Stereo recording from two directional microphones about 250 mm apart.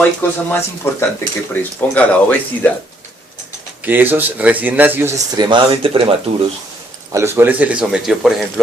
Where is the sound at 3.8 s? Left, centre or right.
Centre.